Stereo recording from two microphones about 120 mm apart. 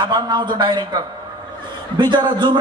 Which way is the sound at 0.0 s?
40° right (ahead or behind).